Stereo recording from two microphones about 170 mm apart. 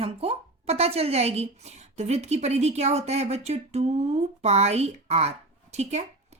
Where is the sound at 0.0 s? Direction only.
35° right (ahead or behind).